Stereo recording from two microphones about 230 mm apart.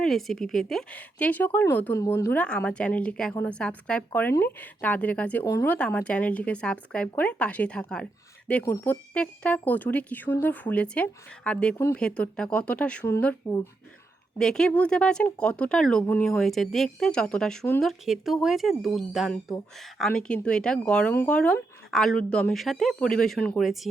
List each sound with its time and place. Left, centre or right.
0.0 s speech: centre